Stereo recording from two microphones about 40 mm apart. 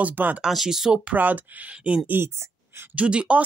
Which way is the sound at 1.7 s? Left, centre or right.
Right.